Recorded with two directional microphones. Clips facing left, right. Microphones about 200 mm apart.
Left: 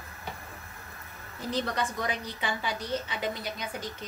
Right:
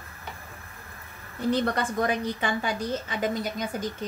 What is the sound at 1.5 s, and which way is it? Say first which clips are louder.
A woman's voice: right 5 dB; 55° right (ahead or behind).